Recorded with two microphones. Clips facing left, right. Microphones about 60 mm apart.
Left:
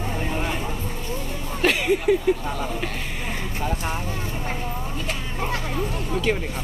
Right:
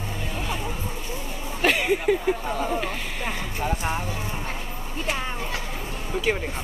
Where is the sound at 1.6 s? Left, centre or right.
Centre.